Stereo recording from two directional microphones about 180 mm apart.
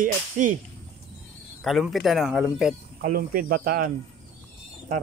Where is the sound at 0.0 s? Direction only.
45° right (ahead or behind).